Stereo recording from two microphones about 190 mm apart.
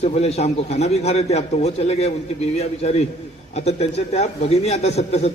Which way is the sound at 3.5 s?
35° left (ahead or behind).